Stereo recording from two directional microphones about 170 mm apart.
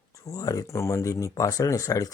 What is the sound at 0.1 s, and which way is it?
Speech, 20° left (ahead or behind).